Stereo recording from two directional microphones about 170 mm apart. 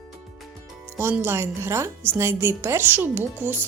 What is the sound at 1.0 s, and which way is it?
A woman's voice, 15° right (ahead or behind).